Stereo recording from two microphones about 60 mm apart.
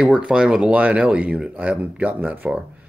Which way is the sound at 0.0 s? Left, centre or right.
Centre.